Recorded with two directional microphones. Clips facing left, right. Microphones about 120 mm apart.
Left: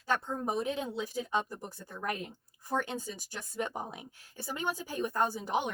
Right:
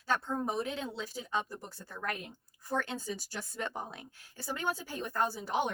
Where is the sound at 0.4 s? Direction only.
20° left (ahead or behind).